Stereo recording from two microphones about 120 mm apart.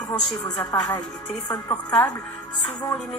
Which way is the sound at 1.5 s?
30° left (ahead or behind).